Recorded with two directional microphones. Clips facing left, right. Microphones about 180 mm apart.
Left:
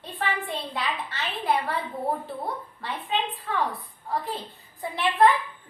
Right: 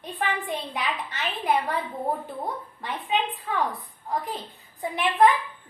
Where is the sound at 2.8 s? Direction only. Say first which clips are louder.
Right 2 dB; 15° right (ahead or behind).